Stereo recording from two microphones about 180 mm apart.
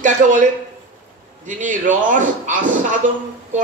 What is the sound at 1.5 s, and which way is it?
Speech, 45° right (ahead or behind).